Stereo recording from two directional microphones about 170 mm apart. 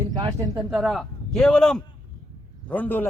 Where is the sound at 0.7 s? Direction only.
Centre (ahead or behind).